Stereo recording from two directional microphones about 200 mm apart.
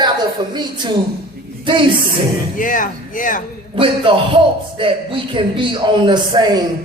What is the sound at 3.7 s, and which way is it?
A man's voice, 25° right (ahead or behind).